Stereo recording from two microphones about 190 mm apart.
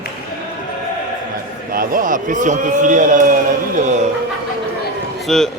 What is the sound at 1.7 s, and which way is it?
A man's voice, 50° right (ahead or behind).